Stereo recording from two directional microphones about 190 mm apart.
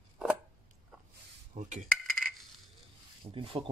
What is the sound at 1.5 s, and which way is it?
Dishes, 40° right (ahead or behind).